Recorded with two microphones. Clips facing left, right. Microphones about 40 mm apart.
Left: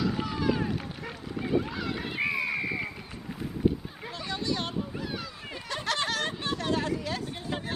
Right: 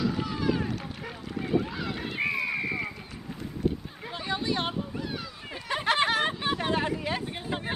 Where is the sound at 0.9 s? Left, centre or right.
Centre.